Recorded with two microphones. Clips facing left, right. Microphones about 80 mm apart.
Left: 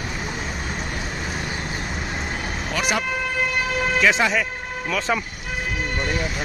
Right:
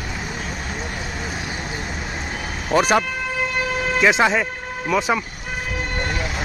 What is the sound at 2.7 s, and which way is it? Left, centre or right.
Speech, right.